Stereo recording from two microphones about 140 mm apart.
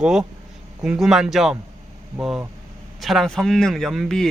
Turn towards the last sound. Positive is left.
turn(degrees=5)  # may be behind; listen again after turning